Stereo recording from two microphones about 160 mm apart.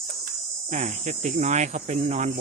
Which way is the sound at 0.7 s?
50° right (ahead or behind).